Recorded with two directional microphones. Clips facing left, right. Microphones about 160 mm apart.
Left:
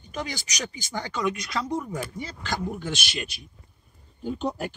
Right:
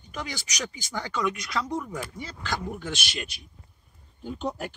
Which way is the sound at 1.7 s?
15° left (ahead or behind).